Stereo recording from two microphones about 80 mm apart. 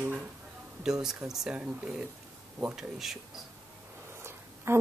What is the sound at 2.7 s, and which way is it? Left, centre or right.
Speech, centre.